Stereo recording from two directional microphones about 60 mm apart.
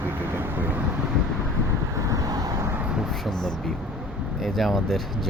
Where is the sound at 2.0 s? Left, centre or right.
Right.